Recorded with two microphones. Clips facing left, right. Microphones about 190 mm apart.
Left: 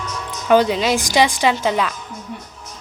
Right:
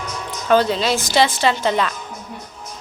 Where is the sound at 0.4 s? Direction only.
15° left (ahead or behind).